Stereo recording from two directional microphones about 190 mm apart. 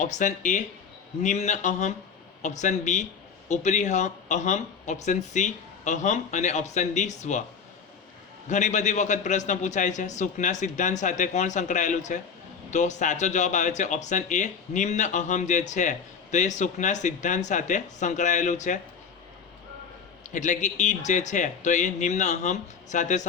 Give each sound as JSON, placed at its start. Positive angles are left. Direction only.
{"t": 0.0, "sound": "speech", "side_deg": 40}
{"t": 8.4, "sound": "speech", "side_deg": 40}
{"t": 20.3, "sound": "speech", "side_deg": 40}